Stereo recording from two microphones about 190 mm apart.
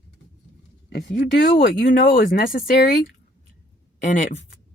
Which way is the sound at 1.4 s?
50° left (ahead or behind).